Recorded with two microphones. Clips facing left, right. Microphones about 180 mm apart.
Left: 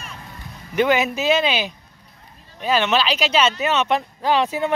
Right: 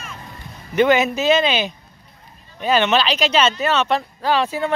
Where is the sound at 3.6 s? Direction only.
15° left (ahead or behind).